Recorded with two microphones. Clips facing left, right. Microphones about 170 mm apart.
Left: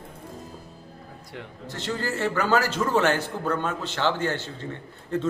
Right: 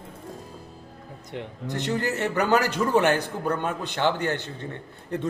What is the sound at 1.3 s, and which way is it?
A man's voice, 20° right (ahead or behind).